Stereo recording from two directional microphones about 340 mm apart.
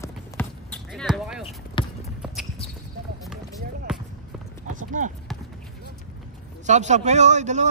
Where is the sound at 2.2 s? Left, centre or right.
Centre.